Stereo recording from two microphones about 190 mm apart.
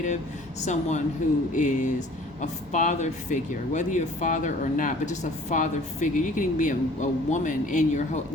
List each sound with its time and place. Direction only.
0.6 s speech: 40° left (ahead or behind)